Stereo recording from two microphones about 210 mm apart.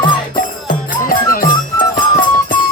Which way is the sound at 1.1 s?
40° left (ahead or behind).